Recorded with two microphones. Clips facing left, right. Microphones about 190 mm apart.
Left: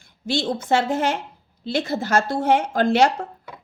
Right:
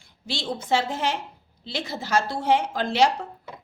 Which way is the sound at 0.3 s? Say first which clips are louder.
Left 4 dB; 50° left (ahead or behind).